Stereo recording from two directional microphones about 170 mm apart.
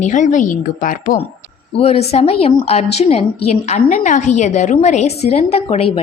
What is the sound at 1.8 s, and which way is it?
A woman's voice, 35° left (ahead or behind).